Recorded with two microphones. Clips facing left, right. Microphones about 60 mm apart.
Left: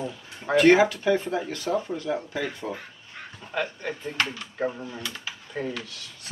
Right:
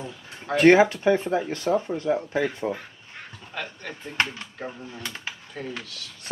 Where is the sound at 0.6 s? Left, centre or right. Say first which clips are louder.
Right 2 dB; right.